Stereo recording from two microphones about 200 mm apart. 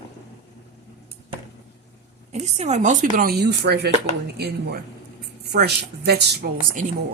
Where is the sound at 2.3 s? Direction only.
35° right (ahead or behind).